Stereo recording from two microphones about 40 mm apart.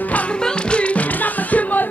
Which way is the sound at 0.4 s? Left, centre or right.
Left.